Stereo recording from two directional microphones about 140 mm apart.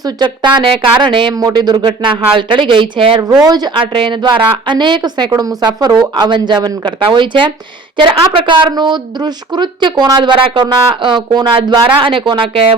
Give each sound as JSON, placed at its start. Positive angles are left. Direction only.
{"t": 0.0, "sound": "a woman's voice", "side_deg": -30}
{"t": 3.2, "sound": "a woman's voice", "side_deg": -25}